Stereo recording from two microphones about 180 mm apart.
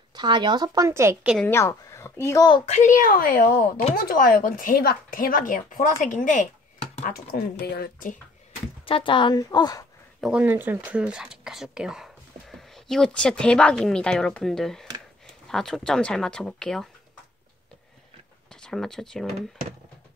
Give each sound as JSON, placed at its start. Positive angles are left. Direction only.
{"t": 0.1, "sound": "a woman's voice", "side_deg": -25}
{"t": 1.4, "sound": "speech", "side_deg": 15}
{"t": 2.6, "sound": "speech", "side_deg": 40}
{"t": 7.0, "sound": "speech", "side_deg": 55}
{"t": 8.8, "sound": "speech", "side_deg": 30}
{"t": 10.2, "sound": "speech", "side_deg": -10}
{"t": 18.5, "sound": "speech", "side_deg": 5}